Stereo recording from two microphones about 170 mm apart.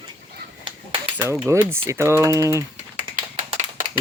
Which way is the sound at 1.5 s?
15° right (ahead or behind).